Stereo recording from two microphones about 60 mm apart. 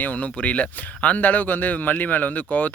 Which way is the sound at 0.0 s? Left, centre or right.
Left.